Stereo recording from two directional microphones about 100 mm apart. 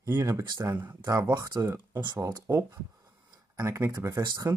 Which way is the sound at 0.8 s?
30° right (ahead or behind).